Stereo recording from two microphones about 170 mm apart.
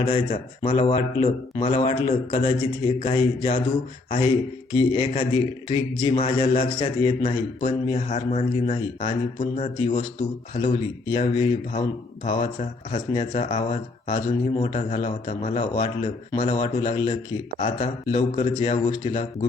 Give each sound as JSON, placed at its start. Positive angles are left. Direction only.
{"t": 0.0, "sound": "a man's voice", "side_deg": 35}
{"t": 4.7, "sound": "a man's voice", "side_deg": 30}